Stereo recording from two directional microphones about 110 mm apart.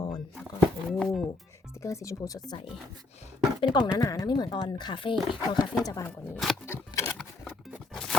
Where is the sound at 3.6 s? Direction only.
35° left (ahead or behind).